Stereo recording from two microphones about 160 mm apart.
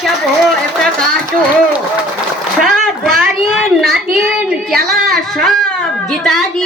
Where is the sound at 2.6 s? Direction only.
Centre (ahead or behind).